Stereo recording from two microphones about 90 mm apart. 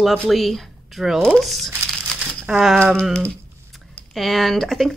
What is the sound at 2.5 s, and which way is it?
Speech, 5° right (ahead or behind).